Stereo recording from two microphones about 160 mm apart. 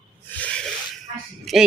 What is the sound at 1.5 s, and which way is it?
Music, centre (ahead or behind).